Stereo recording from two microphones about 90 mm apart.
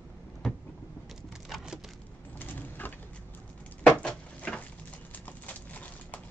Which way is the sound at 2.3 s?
20° left (ahead or behind).